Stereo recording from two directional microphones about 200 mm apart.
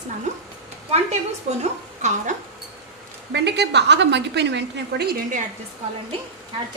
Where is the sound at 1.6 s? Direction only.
35° right (ahead or behind).